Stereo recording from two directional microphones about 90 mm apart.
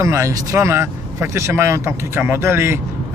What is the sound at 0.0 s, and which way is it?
Speech, 35° right (ahead or behind).